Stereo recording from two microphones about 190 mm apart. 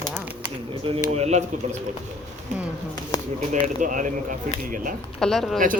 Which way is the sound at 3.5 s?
45° right (ahead or behind).